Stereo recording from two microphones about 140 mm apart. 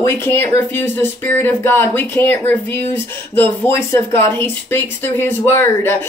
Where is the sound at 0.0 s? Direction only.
15° left (ahead or behind).